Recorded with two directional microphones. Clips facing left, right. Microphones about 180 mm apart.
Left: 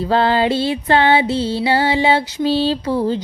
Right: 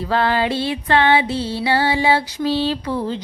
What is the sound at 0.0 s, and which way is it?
Music, 30° left (ahead or behind).